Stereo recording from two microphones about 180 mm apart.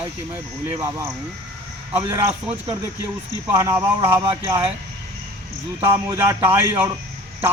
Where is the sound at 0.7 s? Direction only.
15° right (ahead or behind).